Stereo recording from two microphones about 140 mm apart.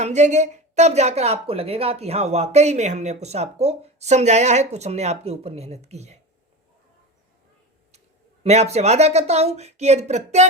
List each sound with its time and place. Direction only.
0.0 s speech: 55° right (ahead or behind)
8.4 s speech: 50° right (ahead or behind)